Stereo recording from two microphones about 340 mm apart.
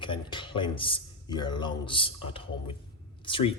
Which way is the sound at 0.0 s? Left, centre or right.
Centre.